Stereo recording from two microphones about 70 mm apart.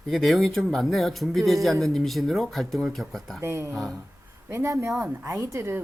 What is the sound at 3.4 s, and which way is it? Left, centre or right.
A woman's voice, right.